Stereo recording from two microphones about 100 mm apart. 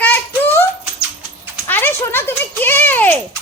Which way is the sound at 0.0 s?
20° left (ahead or behind).